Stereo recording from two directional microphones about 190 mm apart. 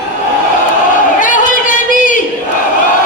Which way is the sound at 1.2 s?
45° left (ahead or behind).